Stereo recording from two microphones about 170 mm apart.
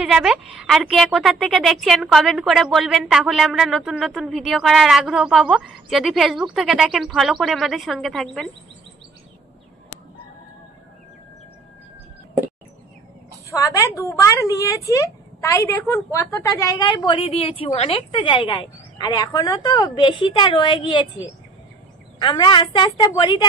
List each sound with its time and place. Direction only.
0.0 s a woman's voice: 5° right (ahead or behind)
13.5 s a woman's voice: 15° left (ahead or behind)
22.2 s a woman's voice: 25° left (ahead or behind)